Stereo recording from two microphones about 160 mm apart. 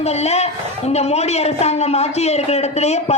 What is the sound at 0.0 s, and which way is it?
A woman's voice, 40° left (ahead or behind).